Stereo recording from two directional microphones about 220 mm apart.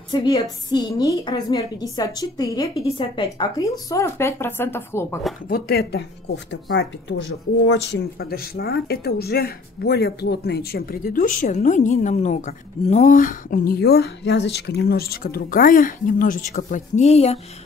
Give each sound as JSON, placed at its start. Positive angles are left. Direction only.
{"t": 0.1, "sound": "music", "side_deg": 20}
{"t": 0.7, "sound": "a woman's voice", "side_deg": 15}
{"t": 5.5, "sound": "speech", "side_deg": 45}